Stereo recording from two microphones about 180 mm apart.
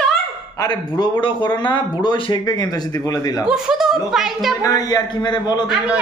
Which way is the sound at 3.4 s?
5° right (ahead or behind).